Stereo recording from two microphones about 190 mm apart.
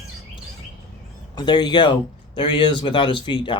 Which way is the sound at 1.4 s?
20° left (ahead or behind).